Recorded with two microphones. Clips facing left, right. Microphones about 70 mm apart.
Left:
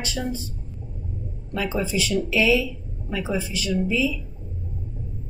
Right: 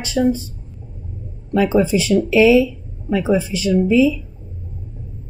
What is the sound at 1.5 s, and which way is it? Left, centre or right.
Speech, right.